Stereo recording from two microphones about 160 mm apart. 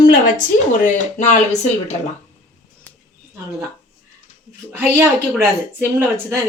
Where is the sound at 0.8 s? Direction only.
50° left (ahead or behind).